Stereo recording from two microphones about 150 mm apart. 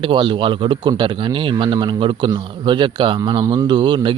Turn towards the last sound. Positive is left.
turn(degrees=-30)  # may be behind; listen again after turning